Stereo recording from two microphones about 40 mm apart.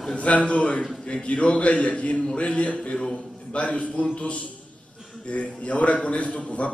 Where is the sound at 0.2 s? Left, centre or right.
Left.